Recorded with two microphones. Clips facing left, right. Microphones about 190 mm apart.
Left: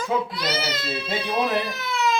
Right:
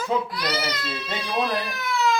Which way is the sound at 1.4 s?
20° left (ahead or behind).